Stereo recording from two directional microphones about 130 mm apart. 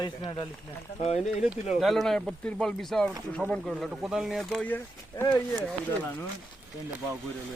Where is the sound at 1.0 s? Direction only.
55° left (ahead or behind).